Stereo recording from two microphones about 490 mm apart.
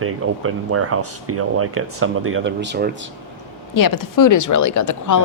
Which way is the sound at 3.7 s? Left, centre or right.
Left.